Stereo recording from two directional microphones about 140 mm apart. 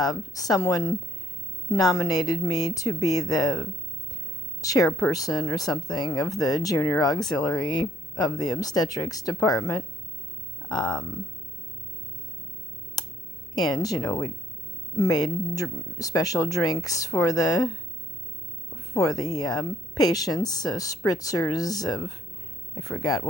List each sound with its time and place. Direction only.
0.0 s speech: 25° left (ahead or behind)
7.3 s speech: centre (ahead or behind)
7.5 s speech: 30° left (ahead or behind)
13.6 s speech: 30° left (ahead or behind)
18.9 s speech: 25° left (ahead or behind)